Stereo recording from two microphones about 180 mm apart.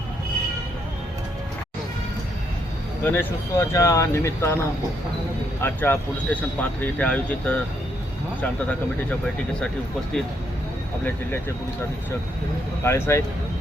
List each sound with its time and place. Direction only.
3.0 s speech: 10° left (ahead or behind)
5.6 s speech: 10° left (ahead or behind)
11.0 s speech: 10° left (ahead or behind)
12.8 s speech: 15° left (ahead or behind)